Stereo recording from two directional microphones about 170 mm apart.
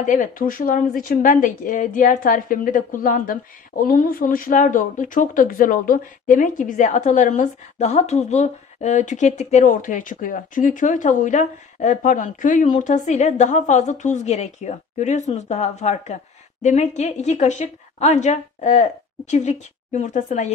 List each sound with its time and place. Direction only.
0.0 s speech: 50° left (ahead or behind)